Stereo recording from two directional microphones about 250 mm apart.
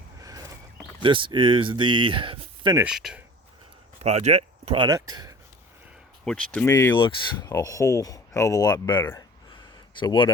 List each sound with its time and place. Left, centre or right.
0.2 s a sound: centre
1.0 s speech: centre
2.8 s speech: centre
4.0 s speech: right
6.2 s a man's voice: centre